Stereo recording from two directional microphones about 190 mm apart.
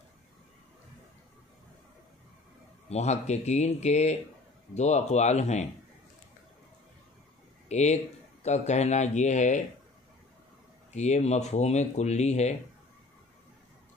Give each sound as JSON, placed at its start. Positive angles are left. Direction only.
{"t": 2.9, "sound": "speech", "side_deg": 35}
{"t": 7.6, "sound": "speech", "side_deg": 35}
{"t": 10.9, "sound": "speech", "side_deg": 35}